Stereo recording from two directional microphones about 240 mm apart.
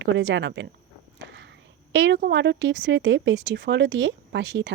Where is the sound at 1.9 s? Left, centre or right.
Right.